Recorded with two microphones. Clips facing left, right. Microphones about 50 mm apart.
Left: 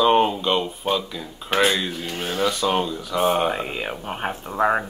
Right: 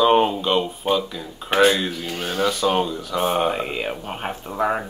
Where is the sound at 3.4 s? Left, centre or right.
Centre.